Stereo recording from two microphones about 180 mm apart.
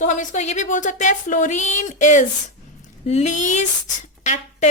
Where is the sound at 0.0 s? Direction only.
40° left (ahead or behind).